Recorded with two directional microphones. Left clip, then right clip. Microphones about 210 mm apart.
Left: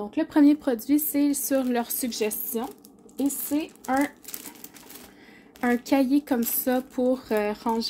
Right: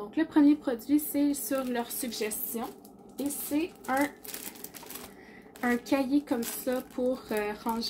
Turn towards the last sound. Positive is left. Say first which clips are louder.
# left 6 dB
turn(degrees=55)  # may be behind; listen again after turning